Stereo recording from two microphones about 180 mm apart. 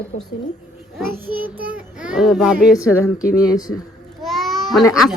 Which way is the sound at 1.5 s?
55° right (ahead or behind).